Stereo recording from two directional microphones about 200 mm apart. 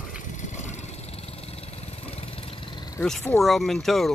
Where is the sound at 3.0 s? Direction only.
Centre (ahead or behind).